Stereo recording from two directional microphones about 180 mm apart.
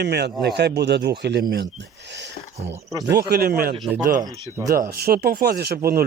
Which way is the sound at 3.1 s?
60° right (ahead or behind).